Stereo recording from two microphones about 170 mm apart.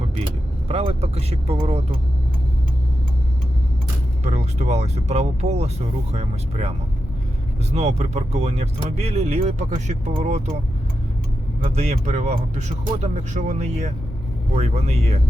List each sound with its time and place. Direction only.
0.7 s speech: 35° right (ahead or behind)
4.2 s speech: 40° right (ahead or behind)
11.6 s speech: 40° right (ahead or behind)